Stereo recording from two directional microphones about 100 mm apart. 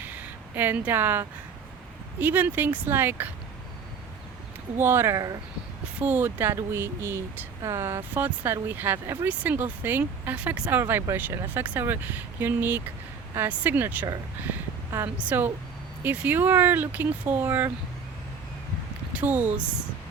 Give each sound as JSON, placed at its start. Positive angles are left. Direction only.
{"t": 0.0, "sound": "a sound", "side_deg": -15}
{"t": 2.1, "sound": "speech", "side_deg": -20}
{"t": 4.8, "sound": "speech", "side_deg": -25}
{"t": 6.0, "sound": "speech", "side_deg": -20}
{"t": 8.1, "sound": "speech", "side_deg": -15}
{"t": 15.2, "sound": "speech", "side_deg": -15}
{"t": 19.1, "sound": "speech", "side_deg": -15}